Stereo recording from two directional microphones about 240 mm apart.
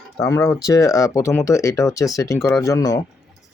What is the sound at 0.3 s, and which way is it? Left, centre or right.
Speech, centre.